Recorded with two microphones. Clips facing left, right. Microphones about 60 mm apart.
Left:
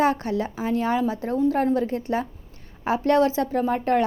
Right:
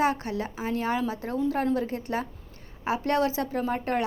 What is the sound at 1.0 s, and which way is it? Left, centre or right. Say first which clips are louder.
A woman's voice: left 5 dB; left.